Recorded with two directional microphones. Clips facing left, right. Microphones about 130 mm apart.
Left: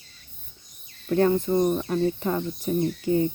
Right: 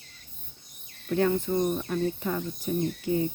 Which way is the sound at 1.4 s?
45° left (ahead or behind).